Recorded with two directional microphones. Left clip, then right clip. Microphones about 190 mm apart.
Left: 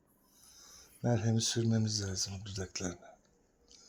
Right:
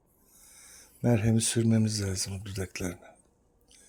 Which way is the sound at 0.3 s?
40° right (ahead or behind).